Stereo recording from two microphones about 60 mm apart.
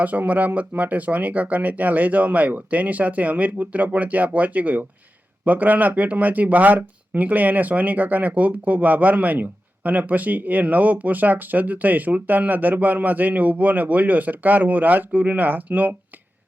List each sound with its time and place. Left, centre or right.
0.0 s speech: right